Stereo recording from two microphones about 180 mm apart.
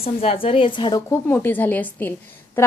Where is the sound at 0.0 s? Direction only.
35° left (ahead or behind).